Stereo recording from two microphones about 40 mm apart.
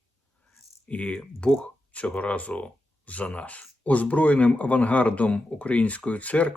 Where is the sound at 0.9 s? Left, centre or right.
Left.